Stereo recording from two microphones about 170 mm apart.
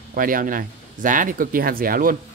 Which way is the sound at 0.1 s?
55° right (ahead or behind).